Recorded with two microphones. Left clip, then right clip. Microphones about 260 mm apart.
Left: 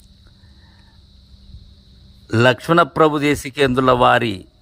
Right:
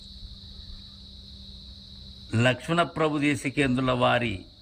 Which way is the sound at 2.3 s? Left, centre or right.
Centre.